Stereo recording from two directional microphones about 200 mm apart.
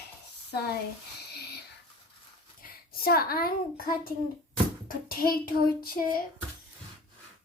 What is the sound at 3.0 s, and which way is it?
Speech, 50° left (ahead or behind).